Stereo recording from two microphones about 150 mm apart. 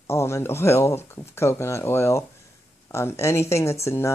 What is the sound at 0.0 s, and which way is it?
Speech, 15° left (ahead or behind).